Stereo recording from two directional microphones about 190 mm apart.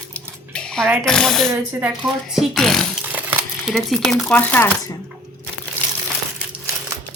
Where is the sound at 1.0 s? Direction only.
5° left (ahead or behind).